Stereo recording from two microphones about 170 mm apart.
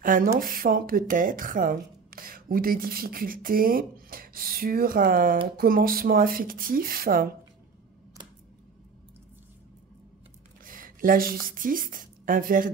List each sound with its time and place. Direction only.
0.0 s speech: 50° right (ahead or behind)
10.6 s a woman's voice: 55° right (ahead or behind)